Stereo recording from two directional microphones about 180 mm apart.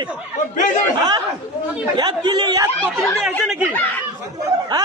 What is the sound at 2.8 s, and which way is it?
Speech, 10° left (ahead or behind).